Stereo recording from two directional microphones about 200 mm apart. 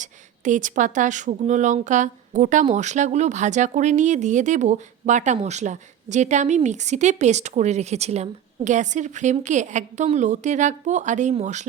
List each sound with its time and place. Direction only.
0.0 s speech: 40° right (ahead or behind)